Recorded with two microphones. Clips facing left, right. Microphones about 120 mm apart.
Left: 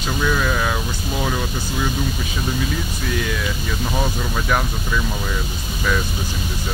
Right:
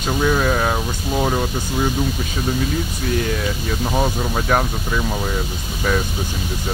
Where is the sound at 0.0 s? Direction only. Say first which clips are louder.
Right 3 dB; 40° right (ahead or behind).